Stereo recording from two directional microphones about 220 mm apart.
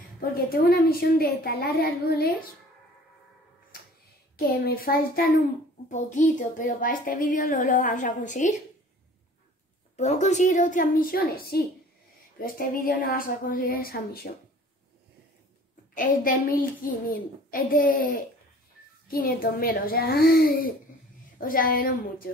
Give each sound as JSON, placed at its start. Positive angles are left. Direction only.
{"t": 0.7, "sound": "a child's voice", "side_deg": 45}
{"t": 4.4, "sound": "a child's voice", "side_deg": 40}
{"t": 9.9, "sound": "a child's voice", "side_deg": 30}
{"t": 15.9, "sound": "a child's voice", "side_deg": 40}